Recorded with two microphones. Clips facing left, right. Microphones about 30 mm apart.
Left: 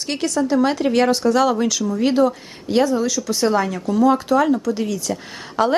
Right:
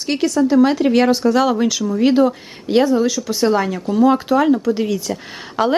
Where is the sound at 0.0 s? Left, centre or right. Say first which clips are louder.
Right 4 dB; centre.